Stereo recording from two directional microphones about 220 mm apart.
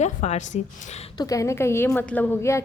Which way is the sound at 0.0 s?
30° left (ahead or behind).